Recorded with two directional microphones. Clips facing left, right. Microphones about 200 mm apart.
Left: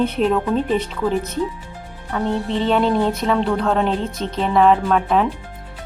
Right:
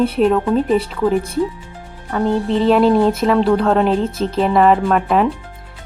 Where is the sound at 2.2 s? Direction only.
35° right (ahead or behind).